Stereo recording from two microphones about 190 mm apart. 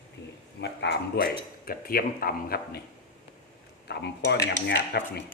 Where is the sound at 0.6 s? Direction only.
60° left (ahead or behind).